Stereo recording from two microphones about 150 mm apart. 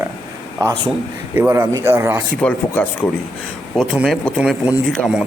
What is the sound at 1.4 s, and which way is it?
Speech, 15° right (ahead or behind).